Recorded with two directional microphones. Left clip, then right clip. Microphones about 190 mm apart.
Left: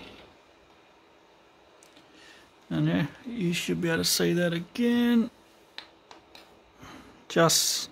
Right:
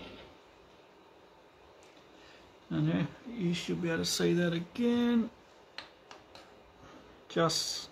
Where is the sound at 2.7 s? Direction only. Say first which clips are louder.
Left 5 dB; 50° left (ahead or behind).